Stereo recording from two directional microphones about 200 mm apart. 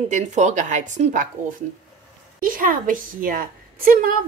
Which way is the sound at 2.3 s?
45° right (ahead or behind).